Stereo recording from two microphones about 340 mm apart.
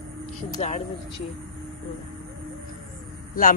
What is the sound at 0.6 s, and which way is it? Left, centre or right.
Speech, centre.